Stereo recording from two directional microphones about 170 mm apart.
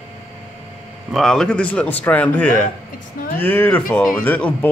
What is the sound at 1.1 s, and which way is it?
Speech, centre (ahead or behind).